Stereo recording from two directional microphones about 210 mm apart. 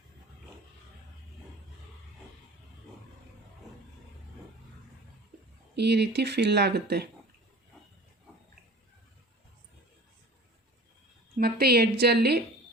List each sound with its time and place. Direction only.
5.7 s speech: 55° right (ahead or behind)
11.3 s speech: 50° right (ahead or behind)